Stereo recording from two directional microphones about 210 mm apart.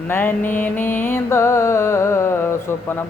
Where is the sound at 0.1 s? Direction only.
10° left (ahead or behind).